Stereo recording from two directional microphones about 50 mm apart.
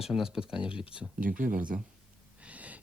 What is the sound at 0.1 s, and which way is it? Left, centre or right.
Speech, centre.